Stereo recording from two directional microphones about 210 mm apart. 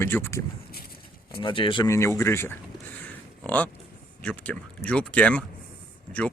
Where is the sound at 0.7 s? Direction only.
45° left (ahead or behind).